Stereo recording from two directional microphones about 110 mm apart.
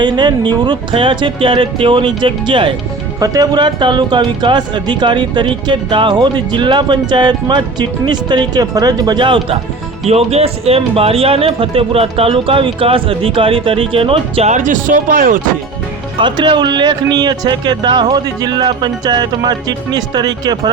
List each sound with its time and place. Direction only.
0.0 s speech: 45° right (ahead or behind)
3.2 s speech: 35° right (ahead or behind)
10.1 s speech: 70° right (ahead or behind)
16.1 s speech: 45° right (ahead or behind)